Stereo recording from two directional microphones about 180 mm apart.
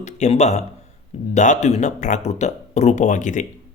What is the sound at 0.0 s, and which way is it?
Speech, 40° left (ahead or behind).